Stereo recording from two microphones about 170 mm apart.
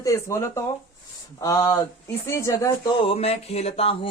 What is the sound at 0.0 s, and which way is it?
Speech, 20° left (ahead or behind).